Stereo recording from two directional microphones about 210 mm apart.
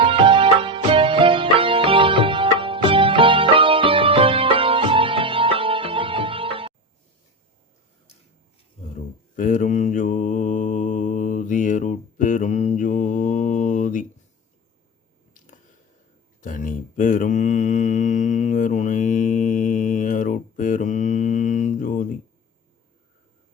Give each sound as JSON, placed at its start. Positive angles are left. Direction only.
{"t": 0.0, "sound": "music", "side_deg": -25}
{"t": 9.3, "sound": "mantra", "side_deg": 40}
{"t": 16.4, "sound": "mantra", "side_deg": 40}